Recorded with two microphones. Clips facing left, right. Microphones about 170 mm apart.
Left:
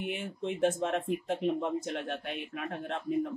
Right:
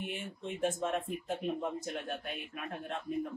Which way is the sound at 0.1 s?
70° left (ahead or behind).